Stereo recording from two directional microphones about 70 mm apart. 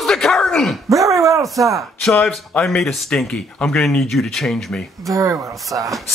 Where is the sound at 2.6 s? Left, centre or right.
Centre.